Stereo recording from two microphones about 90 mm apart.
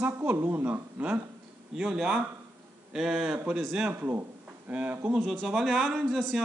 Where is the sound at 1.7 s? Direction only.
5° right (ahead or behind).